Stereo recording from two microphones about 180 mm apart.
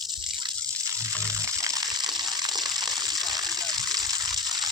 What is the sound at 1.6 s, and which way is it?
Water, 20° right (ahead or behind).